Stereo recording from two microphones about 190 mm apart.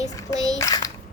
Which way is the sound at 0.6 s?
20° left (ahead or behind).